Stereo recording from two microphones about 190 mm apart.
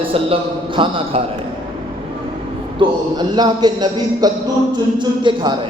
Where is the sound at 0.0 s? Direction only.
30° right (ahead or behind).